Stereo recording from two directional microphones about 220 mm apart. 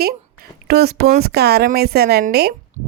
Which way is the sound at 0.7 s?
45° right (ahead or behind).